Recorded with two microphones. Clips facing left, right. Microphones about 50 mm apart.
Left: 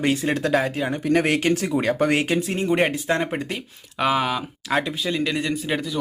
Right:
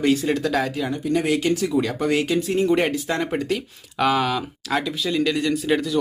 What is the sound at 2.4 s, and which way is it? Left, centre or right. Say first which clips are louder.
Speech: right 2 dB; left.